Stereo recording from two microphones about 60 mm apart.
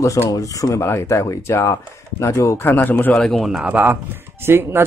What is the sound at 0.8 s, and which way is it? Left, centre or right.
Speech, left.